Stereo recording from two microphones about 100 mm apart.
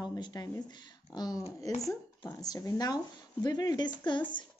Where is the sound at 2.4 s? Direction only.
40° left (ahead or behind).